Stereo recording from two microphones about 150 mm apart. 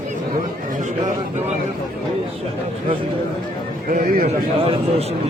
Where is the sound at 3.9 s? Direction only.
70° right (ahead or behind).